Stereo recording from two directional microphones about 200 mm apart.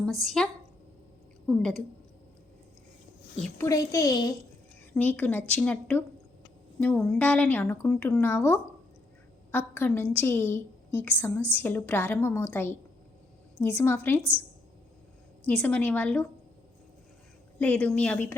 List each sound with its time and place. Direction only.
0.0 s a woman's voice: centre (ahead or behind)
1.5 s a woman's voice: centre (ahead or behind)
3.4 s a woman's voice: 15° left (ahead or behind)
4.9 s a woman's voice: 10° left (ahead or behind)
15.4 s a woman's voice: 10° left (ahead or behind)
17.6 s a woman's voice: 5° left (ahead or behind)